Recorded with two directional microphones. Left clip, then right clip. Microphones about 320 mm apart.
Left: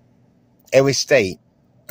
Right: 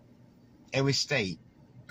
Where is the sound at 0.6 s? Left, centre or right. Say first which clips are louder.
Left 14 dB; left.